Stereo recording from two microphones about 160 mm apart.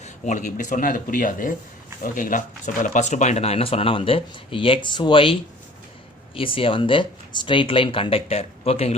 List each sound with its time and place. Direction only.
0.0 s speech: 50° left (ahead or behind)